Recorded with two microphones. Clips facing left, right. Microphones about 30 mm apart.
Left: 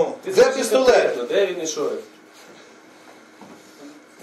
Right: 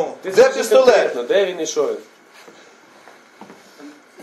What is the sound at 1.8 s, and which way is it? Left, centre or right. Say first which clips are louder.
Speech: right 6 dB; right.